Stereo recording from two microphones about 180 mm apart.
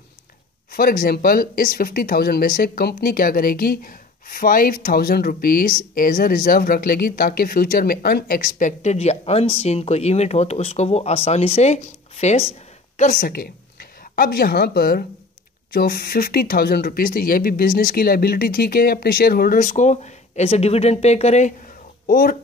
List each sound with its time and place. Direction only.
0.7 s speech: 55° left (ahead or behind); by 21.5 s 40° left (ahead or behind)
22.0 s speech: 55° left (ahead or behind)